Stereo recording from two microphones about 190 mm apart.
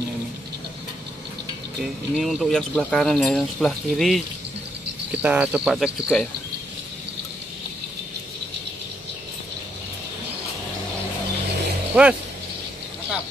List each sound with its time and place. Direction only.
1.8 s speech: centre (ahead or behind)
5.2 s speech: 10° right (ahead or behind)
11.9 s speech: 5° right (ahead or behind)